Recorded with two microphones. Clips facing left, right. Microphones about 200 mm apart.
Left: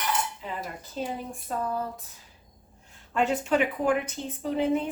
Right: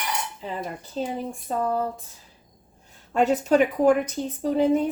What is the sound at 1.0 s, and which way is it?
Speech, 35° right (ahead or behind).